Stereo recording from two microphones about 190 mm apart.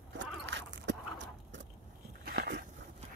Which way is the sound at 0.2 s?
65° right (ahead or behind).